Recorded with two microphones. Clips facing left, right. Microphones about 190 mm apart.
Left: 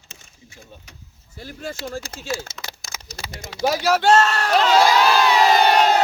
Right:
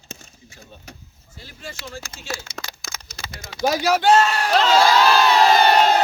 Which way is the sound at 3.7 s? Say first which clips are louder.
Even; centre (ahead or behind).